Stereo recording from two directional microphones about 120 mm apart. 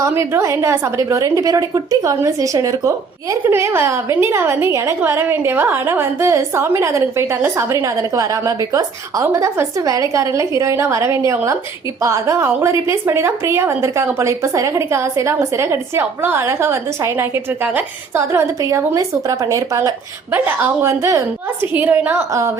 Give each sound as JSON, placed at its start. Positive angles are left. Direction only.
{"t": 0.0, "sound": "a woman's voice", "side_deg": -25}